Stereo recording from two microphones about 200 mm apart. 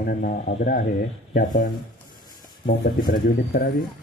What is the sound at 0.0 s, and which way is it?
Speech, 50° left (ahead or behind).